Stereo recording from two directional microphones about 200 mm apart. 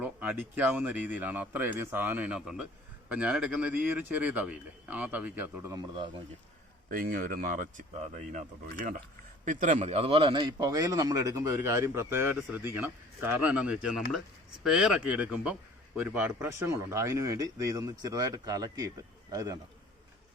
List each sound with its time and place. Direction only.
0.0 s speech: 5° right (ahead or behind)
6.9 s a man's voice: 45° right (ahead or behind); by 19.5 s 20° right (ahead or behind)